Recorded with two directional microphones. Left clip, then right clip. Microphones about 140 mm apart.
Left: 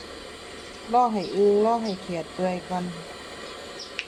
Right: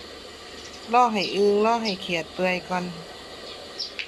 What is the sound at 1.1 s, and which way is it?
Speech, 20° left (ahead or behind).